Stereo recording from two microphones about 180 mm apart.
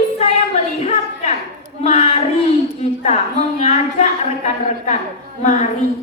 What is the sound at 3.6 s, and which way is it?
A woman's voice, 35° left (ahead or behind).